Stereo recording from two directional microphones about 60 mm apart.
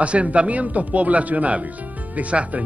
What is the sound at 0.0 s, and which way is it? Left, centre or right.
Speech, right.